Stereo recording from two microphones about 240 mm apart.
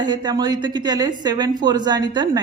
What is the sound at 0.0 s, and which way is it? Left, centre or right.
A woman's voice, centre.